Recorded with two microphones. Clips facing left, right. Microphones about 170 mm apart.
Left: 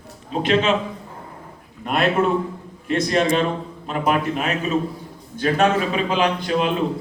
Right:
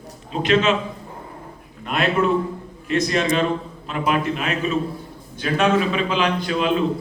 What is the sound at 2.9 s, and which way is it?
A man's voice, 30° left (ahead or behind).